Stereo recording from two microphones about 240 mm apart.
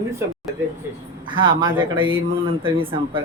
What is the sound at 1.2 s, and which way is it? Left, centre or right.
Speech, centre.